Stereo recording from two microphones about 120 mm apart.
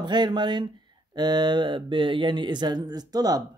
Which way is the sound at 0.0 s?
40° right (ahead or behind).